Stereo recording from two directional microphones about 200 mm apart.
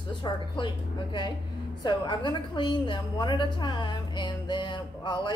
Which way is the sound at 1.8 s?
25° left (ahead or behind).